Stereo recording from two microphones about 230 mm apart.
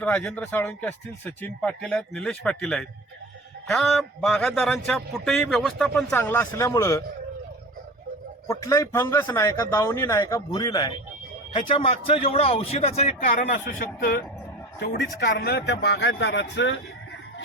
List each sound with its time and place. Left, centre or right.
0.0 s a man's voice: centre
8.4 s a man's voice: centre; by 16.8 s left